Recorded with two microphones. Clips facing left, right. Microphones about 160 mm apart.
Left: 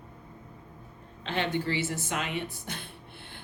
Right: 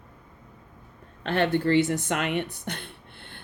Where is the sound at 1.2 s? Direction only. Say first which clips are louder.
Right 6 dB; 55° right (ahead or behind).